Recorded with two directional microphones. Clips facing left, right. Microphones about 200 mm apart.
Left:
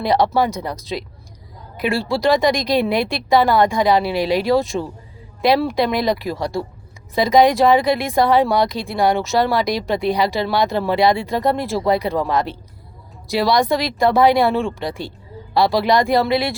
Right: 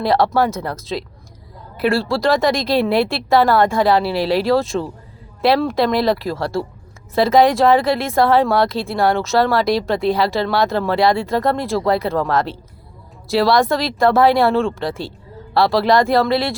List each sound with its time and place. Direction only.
0.0 s a woman's voice: centre (ahead or behind)
16.3 s speech: 20° left (ahead or behind)